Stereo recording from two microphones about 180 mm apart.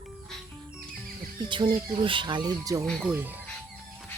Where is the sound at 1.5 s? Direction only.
25° right (ahead or behind).